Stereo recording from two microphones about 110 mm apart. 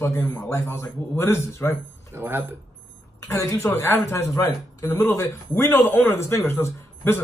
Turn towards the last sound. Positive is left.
turn(degrees=25)  # may be behind; listen again after turning